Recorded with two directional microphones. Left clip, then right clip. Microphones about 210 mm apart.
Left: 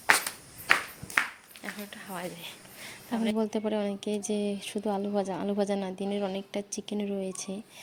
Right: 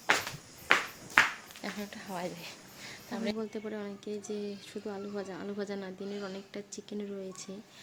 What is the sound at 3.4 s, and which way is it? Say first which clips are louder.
Speech: left 9 dB; 30° left (ahead or behind).